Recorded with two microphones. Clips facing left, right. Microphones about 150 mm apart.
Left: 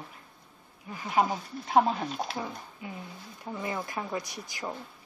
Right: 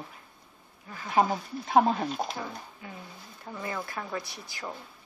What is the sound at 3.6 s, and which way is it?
Speech, 20° left (ahead or behind).